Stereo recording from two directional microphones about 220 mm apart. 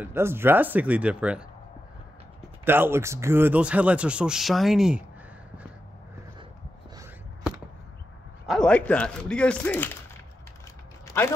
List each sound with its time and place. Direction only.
0.0 s speech: 10° right (ahead or behind)
2.6 s speech: 10° right (ahead or behind)
8.5 s speech: 5° left (ahead or behind)